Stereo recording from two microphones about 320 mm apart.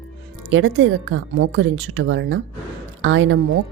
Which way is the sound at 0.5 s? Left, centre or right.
Right.